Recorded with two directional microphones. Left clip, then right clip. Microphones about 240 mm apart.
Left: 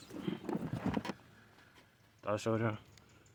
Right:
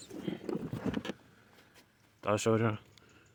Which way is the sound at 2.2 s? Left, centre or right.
Right.